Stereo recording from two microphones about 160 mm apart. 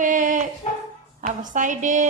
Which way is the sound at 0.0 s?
55° right (ahead or behind).